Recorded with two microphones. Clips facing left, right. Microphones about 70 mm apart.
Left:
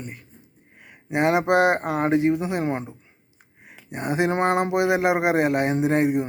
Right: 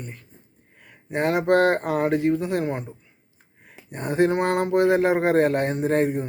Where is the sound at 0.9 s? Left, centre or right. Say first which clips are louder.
Left 2 dB; centre.